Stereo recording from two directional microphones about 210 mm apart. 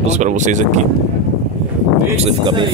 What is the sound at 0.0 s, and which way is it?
Speech, 35° right (ahead or behind).